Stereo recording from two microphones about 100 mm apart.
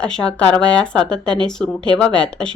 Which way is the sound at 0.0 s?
10° left (ahead or behind).